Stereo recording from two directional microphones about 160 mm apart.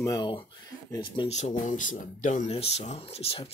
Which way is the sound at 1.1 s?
40° left (ahead or behind).